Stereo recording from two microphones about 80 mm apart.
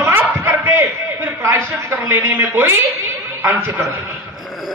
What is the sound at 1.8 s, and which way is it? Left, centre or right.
Speech, right.